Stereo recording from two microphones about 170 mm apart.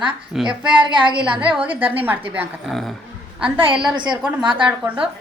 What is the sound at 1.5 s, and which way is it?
A woman's voice, 10° right (ahead or behind).